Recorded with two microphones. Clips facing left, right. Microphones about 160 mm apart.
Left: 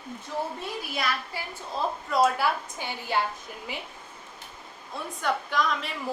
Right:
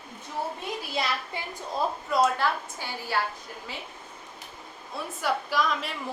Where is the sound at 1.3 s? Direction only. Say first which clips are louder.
Right 1 dB; 20° right (ahead or behind).